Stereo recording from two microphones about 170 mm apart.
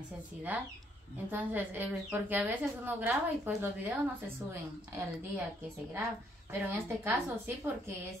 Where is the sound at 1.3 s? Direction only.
10° right (ahead or behind).